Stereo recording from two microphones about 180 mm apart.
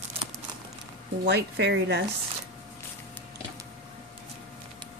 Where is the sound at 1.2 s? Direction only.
65° right (ahead or behind).